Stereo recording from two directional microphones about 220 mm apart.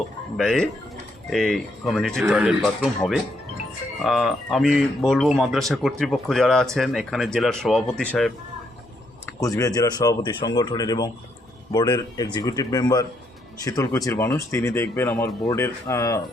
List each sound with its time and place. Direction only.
0.3 s speech: centre (ahead or behind)
9.4 s speech: 15° left (ahead or behind)